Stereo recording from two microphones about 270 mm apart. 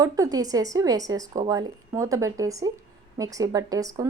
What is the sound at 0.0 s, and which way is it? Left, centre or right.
A woman's voice, centre.